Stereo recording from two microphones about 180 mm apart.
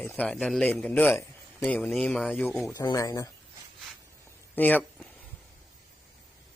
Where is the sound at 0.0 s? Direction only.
10° left (ahead or behind).